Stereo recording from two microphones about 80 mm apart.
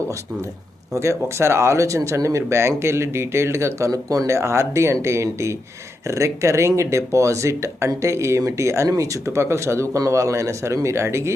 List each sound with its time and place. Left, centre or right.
0.9 s speech: right